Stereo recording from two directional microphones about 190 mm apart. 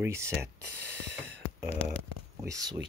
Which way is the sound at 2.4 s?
15° right (ahead or behind).